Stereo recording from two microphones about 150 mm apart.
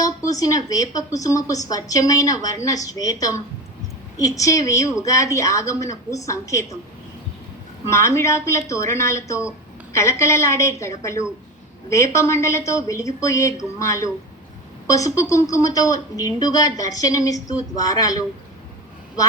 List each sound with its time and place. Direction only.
0.0 s a woman's voice: 25° left (ahead or behind)
7.9 s a woman's voice: 20° left (ahead or behind)